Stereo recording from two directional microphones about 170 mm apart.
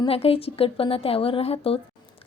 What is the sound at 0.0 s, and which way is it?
A woman's voice, 35° left (ahead or behind).